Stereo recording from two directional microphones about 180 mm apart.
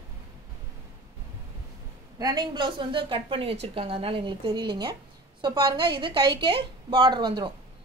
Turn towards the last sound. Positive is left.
turn(degrees=-25)  # may be behind; listen again after turning